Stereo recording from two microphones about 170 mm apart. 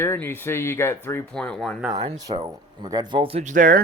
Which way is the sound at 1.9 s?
40° right (ahead or behind).